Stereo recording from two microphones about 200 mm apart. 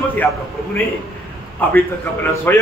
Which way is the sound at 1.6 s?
10° left (ahead or behind).